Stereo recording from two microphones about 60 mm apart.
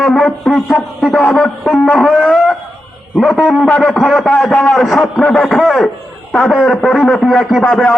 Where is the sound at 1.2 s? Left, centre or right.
Left.